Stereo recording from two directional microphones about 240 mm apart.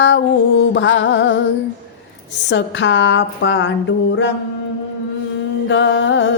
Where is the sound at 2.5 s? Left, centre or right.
Left.